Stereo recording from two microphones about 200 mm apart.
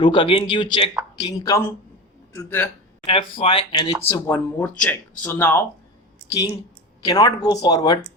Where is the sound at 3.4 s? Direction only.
25° left (ahead or behind).